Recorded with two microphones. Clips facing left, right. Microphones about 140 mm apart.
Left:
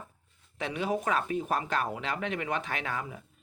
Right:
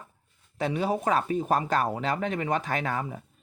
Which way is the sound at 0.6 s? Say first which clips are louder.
Right 4 dB; 35° right (ahead or behind).